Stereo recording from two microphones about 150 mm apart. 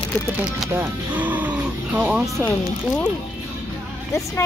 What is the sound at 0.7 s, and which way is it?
Speech, 10° right (ahead or behind).